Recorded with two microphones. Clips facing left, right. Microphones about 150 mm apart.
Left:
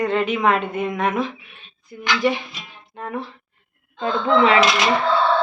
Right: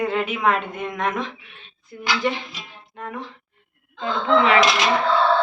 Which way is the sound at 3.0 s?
30° left (ahead or behind).